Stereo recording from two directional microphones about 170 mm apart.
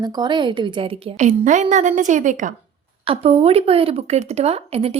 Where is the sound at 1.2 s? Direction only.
45° right (ahead or behind).